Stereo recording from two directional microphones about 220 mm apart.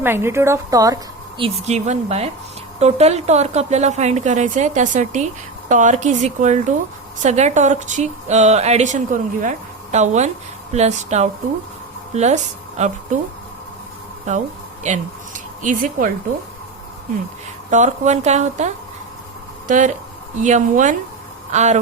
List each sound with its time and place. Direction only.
0.0 s a woman's voice: 10° right (ahead or behind)
1.6 s a woman's voice: 30° right (ahead or behind)
15.6 s speech: 40° right (ahead or behind)
17.7 s speech: 35° right (ahead or behind)